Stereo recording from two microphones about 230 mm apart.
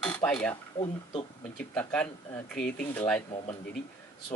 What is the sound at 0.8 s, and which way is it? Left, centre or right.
Speech, left.